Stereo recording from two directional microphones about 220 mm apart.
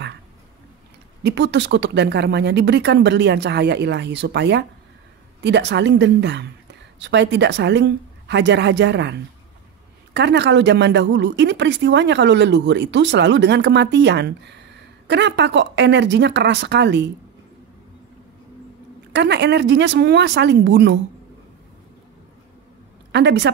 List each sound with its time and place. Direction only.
1.2 s a woman's voice: 50° right (ahead or behind)
19.1 s a woman's voice: 50° right (ahead or behind)
23.1 s a woman's voice: 50° right (ahead or behind)